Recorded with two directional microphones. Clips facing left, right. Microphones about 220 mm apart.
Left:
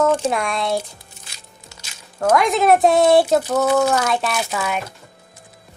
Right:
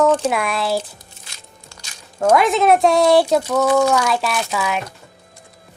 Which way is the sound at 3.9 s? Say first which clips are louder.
Right 1 dB; centre (ahead or behind).